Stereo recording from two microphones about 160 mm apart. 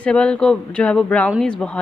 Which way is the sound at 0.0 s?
5° left (ahead or behind).